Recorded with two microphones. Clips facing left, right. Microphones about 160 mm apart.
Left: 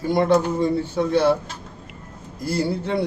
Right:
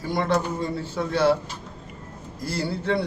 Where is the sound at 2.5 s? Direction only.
15° left (ahead or behind).